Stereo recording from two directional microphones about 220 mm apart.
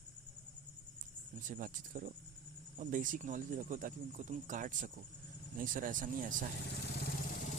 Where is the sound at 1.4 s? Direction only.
35° right (ahead or behind).